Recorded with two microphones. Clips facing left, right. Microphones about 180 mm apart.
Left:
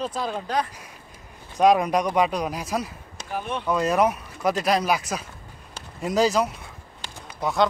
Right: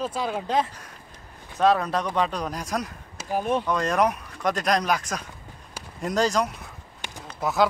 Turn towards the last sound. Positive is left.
turn(degrees=-5)  # may be behind; listen again after turning